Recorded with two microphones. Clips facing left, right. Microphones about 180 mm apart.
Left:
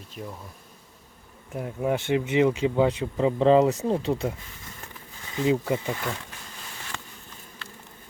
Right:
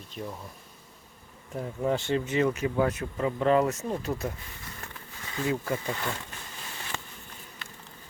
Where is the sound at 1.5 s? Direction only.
10° left (ahead or behind).